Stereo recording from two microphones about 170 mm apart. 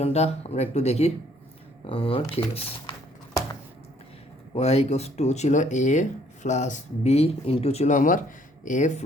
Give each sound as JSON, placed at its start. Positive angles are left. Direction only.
{"t": 0.0, "sound": "speech", "side_deg": 40}
{"t": 4.5, "sound": "speech", "side_deg": 35}